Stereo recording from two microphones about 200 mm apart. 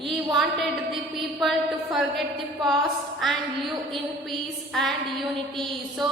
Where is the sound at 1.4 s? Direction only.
Centre (ahead or behind).